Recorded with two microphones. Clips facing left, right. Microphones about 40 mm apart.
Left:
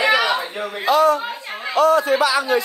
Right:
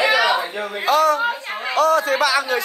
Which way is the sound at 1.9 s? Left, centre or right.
Right.